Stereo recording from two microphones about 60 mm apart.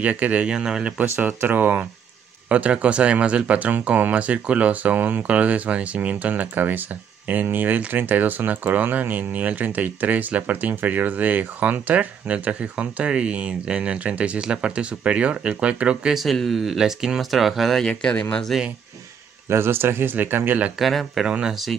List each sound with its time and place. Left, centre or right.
0.0 s speech: right
0.6 s speech: centre
1.0 s speech: right; by 16.2 s centre
16.3 s speech: centre
18.5 s speech: centre
19.5 s speech: right
20.8 s speech: centre
21.3 s speech: centre